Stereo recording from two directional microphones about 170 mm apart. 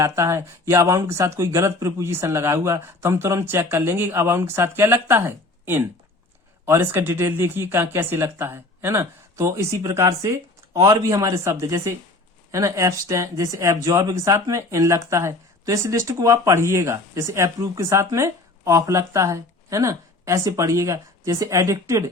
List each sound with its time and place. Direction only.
0.0 s speech: 20° right (ahead or behind)